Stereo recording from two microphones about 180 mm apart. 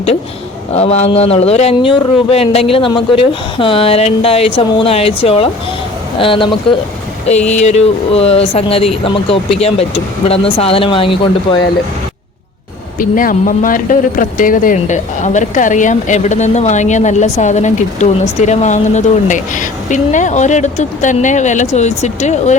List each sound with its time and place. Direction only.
0.7 s speech: 35° left (ahead or behind)
7.3 s speech: 40° left (ahead or behind)
13.0 s speech: 50° left (ahead or behind)